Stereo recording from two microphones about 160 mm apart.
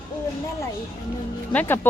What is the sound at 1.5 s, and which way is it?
Speech, 10° left (ahead or behind).